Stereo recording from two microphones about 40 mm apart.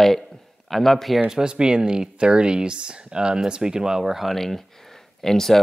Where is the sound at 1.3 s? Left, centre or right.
Right.